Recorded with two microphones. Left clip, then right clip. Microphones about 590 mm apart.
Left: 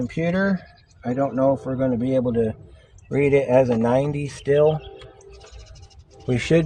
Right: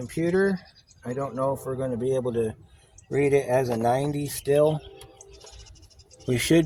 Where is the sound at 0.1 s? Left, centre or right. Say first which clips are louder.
Right 2 dB; right.